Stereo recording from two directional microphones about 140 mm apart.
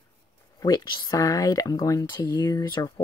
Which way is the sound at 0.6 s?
30° left (ahead or behind).